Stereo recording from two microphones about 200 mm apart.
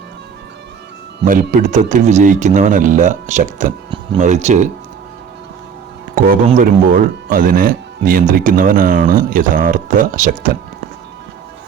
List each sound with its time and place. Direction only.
1.2 s a man's voice: 40° right (ahead or behind)
6.1 s speech: 40° right (ahead or behind)